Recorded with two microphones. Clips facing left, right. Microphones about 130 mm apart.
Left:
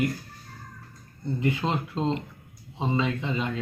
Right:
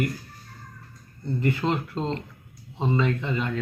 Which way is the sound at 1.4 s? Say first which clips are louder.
Right 2 dB; 15° left (ahead or behind).